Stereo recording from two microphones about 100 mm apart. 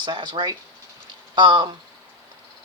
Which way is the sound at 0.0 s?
50° right (ahead or behind).